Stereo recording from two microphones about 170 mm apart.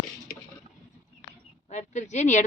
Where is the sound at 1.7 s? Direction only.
45° left (ahead or behind).